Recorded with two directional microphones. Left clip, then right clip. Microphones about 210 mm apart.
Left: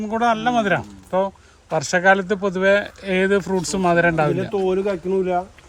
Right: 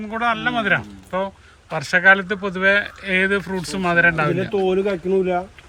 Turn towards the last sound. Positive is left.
turn(degrees=15)  # may be behind; listen again after turning